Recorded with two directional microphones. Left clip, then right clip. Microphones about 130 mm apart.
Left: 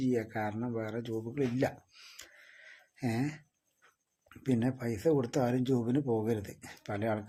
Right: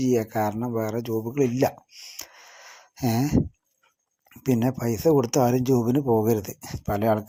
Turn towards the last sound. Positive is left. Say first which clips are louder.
# right 11 dB
turn(degrees=-45)  # may be behind; listen again after turning